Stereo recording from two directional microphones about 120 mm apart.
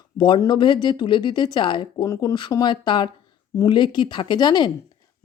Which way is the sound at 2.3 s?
35° left (ahead or behind).